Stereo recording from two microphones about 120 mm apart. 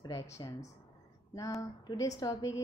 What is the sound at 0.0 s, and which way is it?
Speech, 30° left (ahead or behind).